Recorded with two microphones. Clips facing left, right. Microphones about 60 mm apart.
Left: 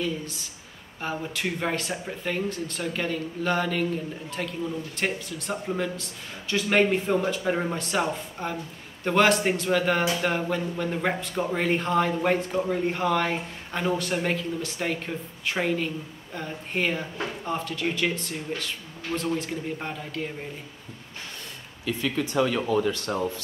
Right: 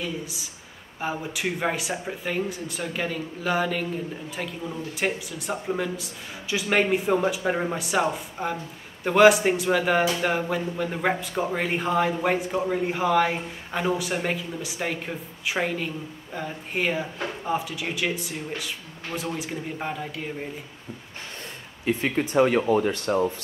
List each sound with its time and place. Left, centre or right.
0.0 s a man's voice: centre
21.8 s speech: right